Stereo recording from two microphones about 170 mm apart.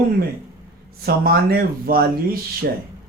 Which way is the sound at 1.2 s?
65° right (ahead or behind).